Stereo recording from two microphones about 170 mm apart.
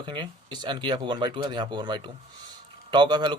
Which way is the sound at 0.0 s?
30° right (ahead or behind).